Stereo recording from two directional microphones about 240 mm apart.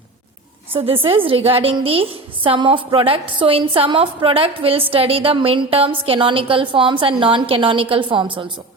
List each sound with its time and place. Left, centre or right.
0.7 s a woman's voice: right